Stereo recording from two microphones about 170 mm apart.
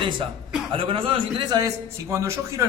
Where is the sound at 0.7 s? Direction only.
30° right (ahead or behind).